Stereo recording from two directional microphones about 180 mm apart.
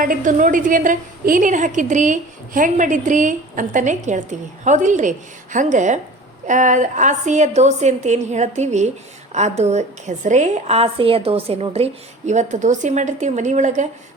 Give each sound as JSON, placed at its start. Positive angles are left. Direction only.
{"t": 0.0, "sound": "a woman's voice", "side_deg": -50}